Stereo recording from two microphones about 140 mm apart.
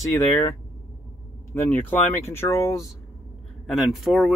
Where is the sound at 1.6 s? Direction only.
15° left (ahead or behind).